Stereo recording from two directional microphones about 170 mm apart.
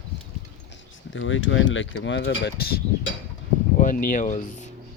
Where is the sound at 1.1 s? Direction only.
90° left.